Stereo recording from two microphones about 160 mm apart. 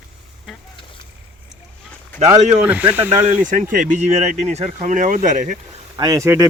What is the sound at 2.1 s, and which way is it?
Speech, 45° right (ahead or behind).